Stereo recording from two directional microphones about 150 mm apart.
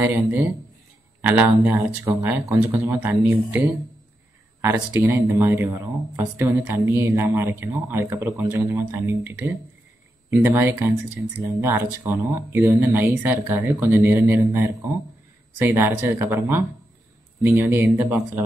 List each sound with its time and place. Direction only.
0.0 s speech: 10° right (ahead or behind)
4.6 s speech: 15° right (ahead or behind)